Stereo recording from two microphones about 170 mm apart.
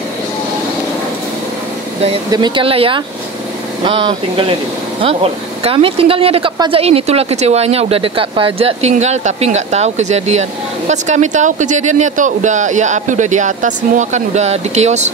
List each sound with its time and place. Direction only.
2.3 s speech: 25° right (ahead or behind)